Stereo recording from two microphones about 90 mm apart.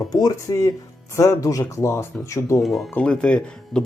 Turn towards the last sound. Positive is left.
turn(degrees=10)  # may be behind; listen again after turning